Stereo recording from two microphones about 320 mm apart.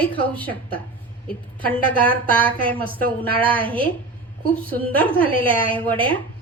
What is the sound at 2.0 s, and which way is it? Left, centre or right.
A woman's voice, centre.